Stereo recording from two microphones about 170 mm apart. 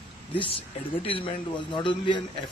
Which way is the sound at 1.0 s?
30° left (ahead or behind).